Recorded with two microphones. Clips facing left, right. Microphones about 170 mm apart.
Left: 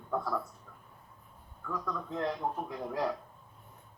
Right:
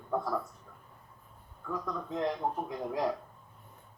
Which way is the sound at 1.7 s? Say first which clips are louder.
Right 1 dB; 15° right (ahead or behind).